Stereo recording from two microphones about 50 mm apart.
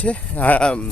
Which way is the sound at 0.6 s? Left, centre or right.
Centre.